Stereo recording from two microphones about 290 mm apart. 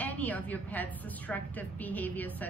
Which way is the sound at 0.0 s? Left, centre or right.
Centre.